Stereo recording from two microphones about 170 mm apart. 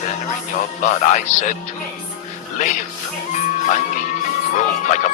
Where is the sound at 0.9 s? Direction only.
45° left (ahead or behind).